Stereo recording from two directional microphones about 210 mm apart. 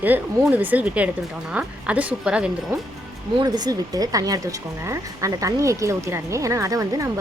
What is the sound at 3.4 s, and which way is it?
Speech, 20° right (ahead or behind).